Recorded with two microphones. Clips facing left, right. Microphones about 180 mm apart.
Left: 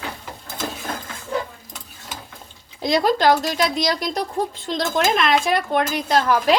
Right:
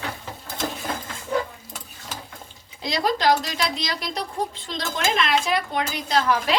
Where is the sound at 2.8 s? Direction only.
50° left (ahead or behind).